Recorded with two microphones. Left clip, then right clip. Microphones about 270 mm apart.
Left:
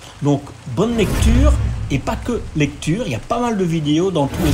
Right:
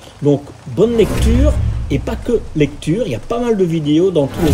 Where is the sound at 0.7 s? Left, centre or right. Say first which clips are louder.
Right 6 dB; centre.